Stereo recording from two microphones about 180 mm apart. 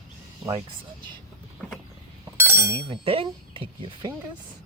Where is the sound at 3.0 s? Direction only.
30° right (ahead or behind).